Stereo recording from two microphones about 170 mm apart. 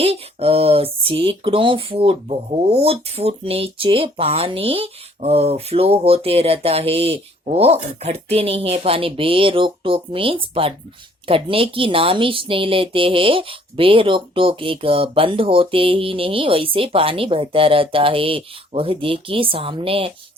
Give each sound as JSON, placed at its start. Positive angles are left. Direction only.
{"t": 0.0, "sound": "speech", "side_deg": -35}